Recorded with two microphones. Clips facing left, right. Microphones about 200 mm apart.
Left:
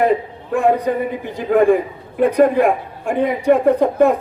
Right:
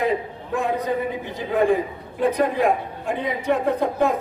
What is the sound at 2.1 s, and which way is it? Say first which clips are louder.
A man's voice: left 7 dB; 55° left (ahead or behind).